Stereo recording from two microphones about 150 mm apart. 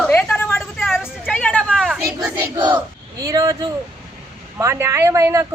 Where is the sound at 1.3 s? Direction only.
10° left (ahead or behind).